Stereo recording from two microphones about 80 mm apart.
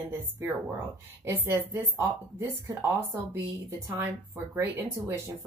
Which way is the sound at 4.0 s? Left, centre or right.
Right.